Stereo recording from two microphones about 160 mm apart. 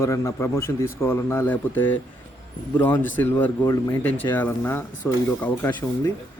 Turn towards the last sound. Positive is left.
turn(degrees=15)  # may be behind; listen again after turning